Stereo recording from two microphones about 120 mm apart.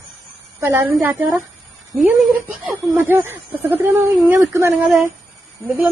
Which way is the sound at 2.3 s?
15° right (ahead or behind).